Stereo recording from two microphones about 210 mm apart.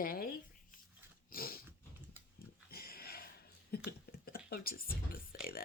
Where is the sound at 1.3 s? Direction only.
45° left (ahead or behind).